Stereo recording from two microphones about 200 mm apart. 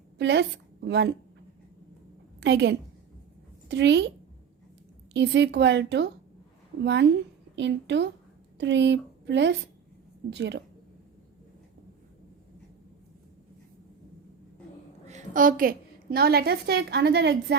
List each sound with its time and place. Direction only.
0.2 s a woman's voice: 60° right (ahead or behind)
2.4 s speech: 60° right (ahead or behind)
5.1 s speech: 60° right (ahead or behind)
15.0 s a woman's voice: 40° right (ahead or behind); by 17.6 s 55° right (ahead or behind)